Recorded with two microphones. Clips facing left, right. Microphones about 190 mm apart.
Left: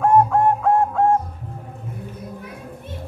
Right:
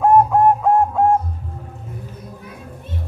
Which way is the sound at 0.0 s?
15° right (ahead or behind).